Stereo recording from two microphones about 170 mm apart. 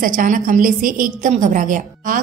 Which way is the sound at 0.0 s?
50° right (ahead or behind).